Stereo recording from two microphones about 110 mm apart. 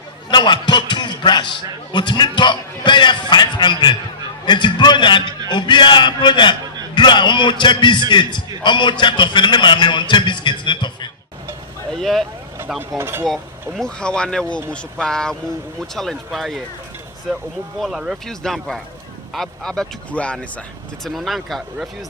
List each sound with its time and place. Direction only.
0.3 s a man's voice: 45° left (ahead or behind)
11.9 s speech: centre (ahead or behind)
13.0 s speech: 20° right (ahead or behind)
13.2 s speech: centre (ahead or behind)
21.0 s speech: centre (ahead or behind)